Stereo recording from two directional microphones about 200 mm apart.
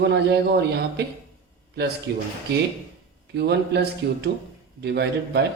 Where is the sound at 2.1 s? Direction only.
55° right (ahead or behind).